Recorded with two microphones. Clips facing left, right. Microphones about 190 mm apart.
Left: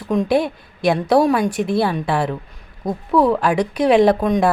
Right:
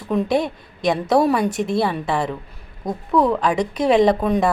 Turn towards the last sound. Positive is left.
turn(degrees=-5)  # may be behind; listen again after turning